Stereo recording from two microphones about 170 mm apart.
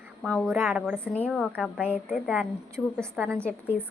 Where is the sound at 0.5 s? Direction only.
10° right (ahead or behind).